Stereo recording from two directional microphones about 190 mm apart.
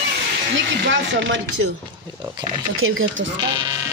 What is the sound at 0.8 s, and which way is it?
Speech, 70° right (ahead or behind).